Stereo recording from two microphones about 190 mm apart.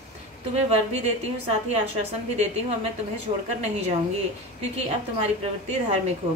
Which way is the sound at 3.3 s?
30° right (ahead or behind).